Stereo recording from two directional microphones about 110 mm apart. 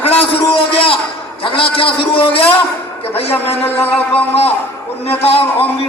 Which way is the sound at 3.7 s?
20° left (ahead or behind).